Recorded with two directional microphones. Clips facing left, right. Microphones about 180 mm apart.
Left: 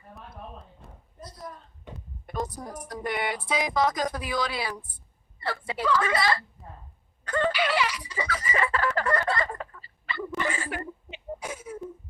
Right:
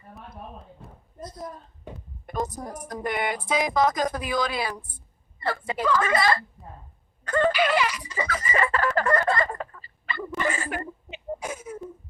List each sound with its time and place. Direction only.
0.8 s a sound: centre (ahead or behind)
2.5 s a woman's voice: 45° right (ahead or behind)
7.3 s chicken: 45° right (ahead or behind)